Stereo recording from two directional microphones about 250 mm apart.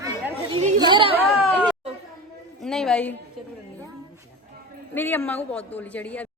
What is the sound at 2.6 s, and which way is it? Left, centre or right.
Speech, centre.